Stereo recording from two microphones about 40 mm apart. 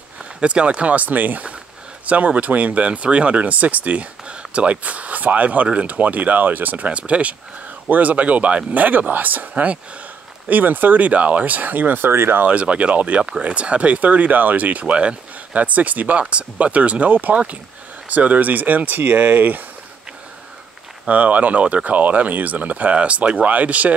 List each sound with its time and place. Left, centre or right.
0.2 s speech: right
6.9 s speech: right
9.5 s speech: right
10.5 s speech: right
12.1 s speech: right
12.4 s speech: right
21.1 s speech: right